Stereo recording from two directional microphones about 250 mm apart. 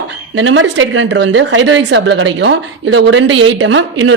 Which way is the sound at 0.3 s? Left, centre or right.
Right.